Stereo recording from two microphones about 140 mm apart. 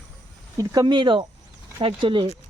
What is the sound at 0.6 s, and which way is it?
Speech, 30° right (ahead or behind).